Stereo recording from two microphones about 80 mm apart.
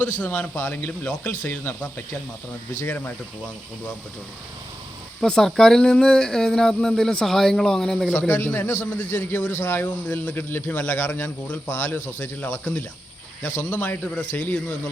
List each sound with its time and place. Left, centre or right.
0.0 s a man's voice: left
0.5 s a man's voice: left
5.2 s speech: centre
8.6 s a man's voice: left
9.0 s a man's voice: left
13.4 s a man's voice: centre